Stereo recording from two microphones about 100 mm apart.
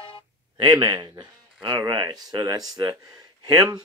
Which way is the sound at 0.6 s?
50° right (ahead or behind).